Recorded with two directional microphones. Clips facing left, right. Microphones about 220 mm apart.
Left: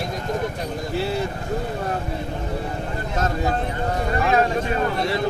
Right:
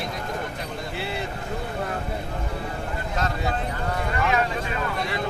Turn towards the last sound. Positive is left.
turn(degrees=40)  # may be behind; listen again after turning